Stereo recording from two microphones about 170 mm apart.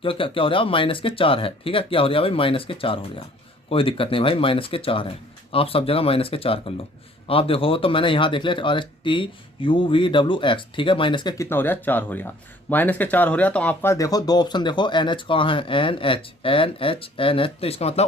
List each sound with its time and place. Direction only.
0.0 s speech: 30° left (ahead or behind)
11.4 s speech: 10° left (ahead or behind); by 18.0 s 35° left (ahead or behind)